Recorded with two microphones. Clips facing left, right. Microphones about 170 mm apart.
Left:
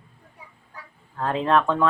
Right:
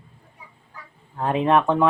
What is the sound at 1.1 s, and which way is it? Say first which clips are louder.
Speech: right 2 dB; 20° right (ahead or behind).